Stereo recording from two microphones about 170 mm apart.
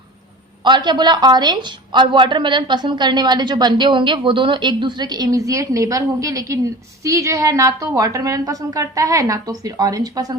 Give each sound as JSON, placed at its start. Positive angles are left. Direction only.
{"t": 0.6, "sound": "a woman's voice", "side_deg": -25}